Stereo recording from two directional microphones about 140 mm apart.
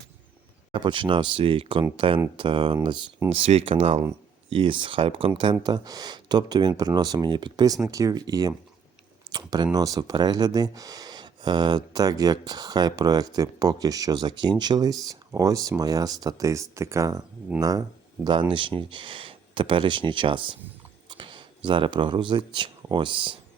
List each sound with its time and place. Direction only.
0.7 s speech: 35° right (ahead or behind)